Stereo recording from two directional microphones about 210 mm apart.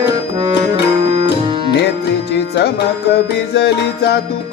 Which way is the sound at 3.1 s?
50° left (ahead or behind).